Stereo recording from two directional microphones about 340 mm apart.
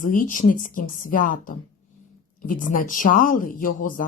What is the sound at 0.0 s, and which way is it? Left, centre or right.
Speech, left.